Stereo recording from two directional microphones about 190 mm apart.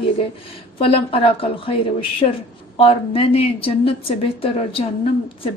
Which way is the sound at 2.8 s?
30° left (ahead or behind).